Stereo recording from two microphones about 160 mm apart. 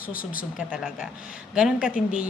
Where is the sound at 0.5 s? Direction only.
5° right (ahead or behind).